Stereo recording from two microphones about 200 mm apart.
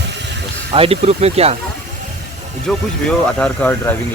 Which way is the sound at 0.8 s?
30° right (ahead or behind).